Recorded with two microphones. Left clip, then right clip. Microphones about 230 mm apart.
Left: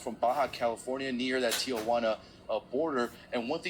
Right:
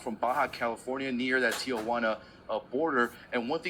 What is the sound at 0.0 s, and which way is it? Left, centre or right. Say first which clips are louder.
Speech: even; right.